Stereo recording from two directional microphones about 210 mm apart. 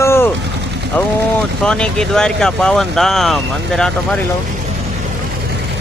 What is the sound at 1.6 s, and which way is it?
Speech, 5° left (ahead or behind).